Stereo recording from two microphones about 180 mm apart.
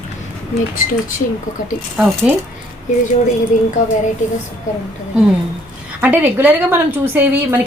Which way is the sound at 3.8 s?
40° left (ahead or behind).